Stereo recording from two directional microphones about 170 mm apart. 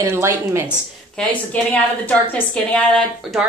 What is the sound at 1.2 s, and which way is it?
A woman's voice, 5° left (ahead or behind).